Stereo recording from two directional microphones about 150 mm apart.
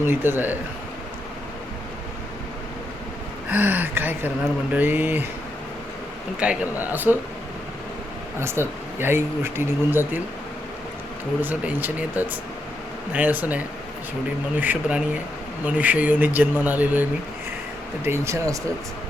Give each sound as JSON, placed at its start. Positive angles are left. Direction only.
{"t": 0.0, "sound": "speech", "side_deg": -15}
{"t": 3.5, "sound": "speech", "side_deg": -10}
{"t": 6.4, "sound": "speech", "side_deg": -10}
{"t": 8.4, "sound": "speech", "side_deg": -15}
{"t": 11.3, "sound": "speech", "side_deg": -10}